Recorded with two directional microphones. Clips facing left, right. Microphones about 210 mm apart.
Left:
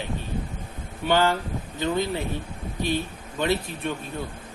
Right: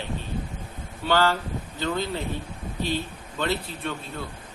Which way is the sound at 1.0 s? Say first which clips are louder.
Left 1 dB; 15° left (ahead or behind).